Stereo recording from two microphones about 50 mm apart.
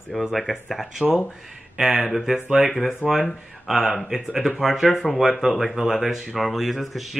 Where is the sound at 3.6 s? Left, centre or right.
Centre.